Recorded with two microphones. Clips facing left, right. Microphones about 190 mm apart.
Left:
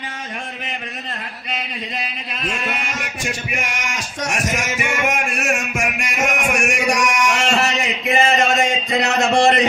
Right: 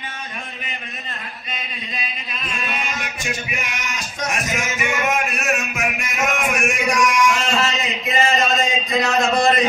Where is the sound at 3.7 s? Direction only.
80° left.